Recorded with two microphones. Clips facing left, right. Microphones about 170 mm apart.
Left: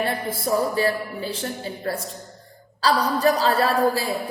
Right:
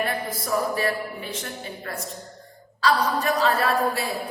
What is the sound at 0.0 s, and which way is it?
A woman's voice, 30° left (ahead or behind).